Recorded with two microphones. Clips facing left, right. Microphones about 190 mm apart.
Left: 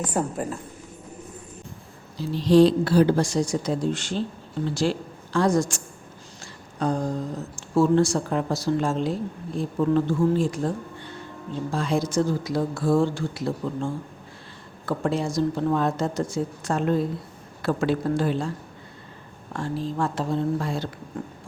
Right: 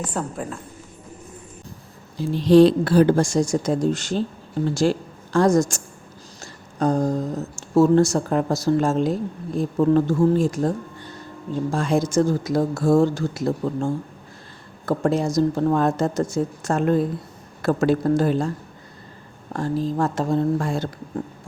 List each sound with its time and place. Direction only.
0.1 s a woman's voice: 5° left (ahead or behind)
2.1 s a woman's voice: 55° right (ahead or behind)
6.4 s a sound: 45° right (ahead or behind)
7.8 s speech: 45° right (ahead or behind)
19.5 s speech: 40° right (ahead or behind)